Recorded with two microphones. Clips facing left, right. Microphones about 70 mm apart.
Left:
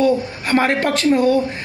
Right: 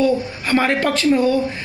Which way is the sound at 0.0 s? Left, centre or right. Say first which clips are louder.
Left 1 dB; left.